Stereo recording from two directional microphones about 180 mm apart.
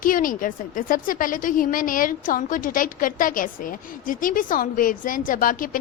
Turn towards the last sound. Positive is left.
turn(degrees=50)  # may be behind; listen again after turning